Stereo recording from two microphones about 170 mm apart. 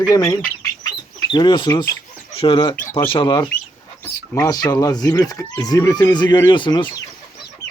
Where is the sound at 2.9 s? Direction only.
15° left (ahead or behind).